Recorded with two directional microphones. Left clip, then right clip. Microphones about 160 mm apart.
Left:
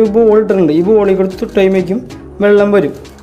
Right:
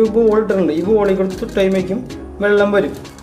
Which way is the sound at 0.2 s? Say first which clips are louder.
Left 5 dB; 40° left (ahead or behind).